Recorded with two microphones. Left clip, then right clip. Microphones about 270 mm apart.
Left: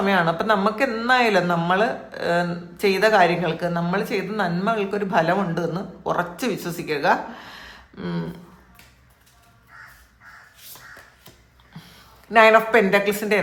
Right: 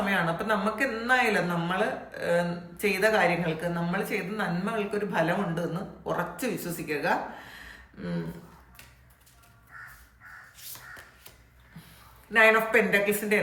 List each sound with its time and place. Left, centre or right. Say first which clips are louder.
0.0 s speech: left 7 dB; centre
12.3 s speech: left 7 dB; centre